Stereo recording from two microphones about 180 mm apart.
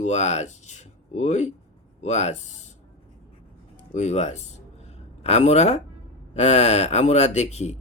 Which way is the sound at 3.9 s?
40° left (ahead or behind).